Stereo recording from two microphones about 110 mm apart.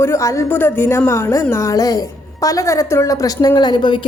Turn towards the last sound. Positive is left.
turn(degrees=45)  # may be behind; listen again after turning